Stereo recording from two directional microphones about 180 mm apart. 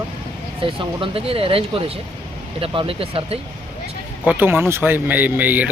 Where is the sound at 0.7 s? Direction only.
30° right (ahead or behind).